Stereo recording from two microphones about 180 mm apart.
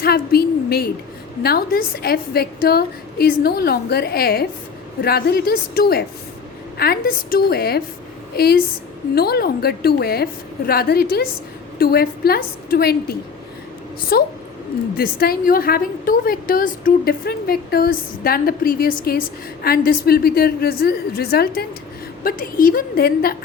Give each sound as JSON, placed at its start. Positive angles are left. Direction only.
{"t": 0.0, "sound": "a sound", "side_deg": 60}
{"t": 1.4, "sound": "a woman's voice", "side_deg": 55}
{"t": 9.1, "sound": "a woman's voice", "side_deg": 60}